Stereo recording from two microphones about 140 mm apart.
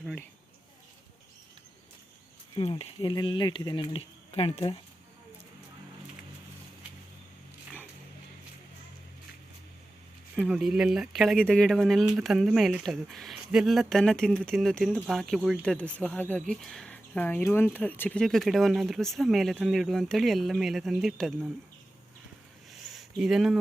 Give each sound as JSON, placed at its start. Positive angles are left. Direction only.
{"t": 2.6, "sound": "speech", "side_deg": 45}
{"t": 10.3, "sound": "speech", "side_deg": 0}
{"t": 15.6, "sound": "speech", "side_deg": 10}
{"t": 22.9, "sound": "a sound", "side_deg": 0}